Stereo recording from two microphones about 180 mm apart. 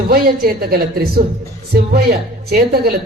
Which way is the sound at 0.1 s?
55° right (ahead or behind).